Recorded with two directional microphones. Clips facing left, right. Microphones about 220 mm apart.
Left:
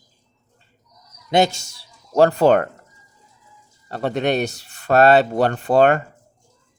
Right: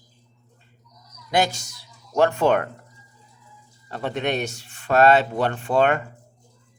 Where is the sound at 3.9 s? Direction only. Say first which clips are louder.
Left 5 dB; 35° left (ahead or behind).